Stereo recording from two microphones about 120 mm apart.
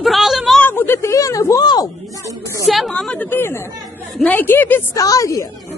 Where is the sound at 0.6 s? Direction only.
20° left (ahead or behind).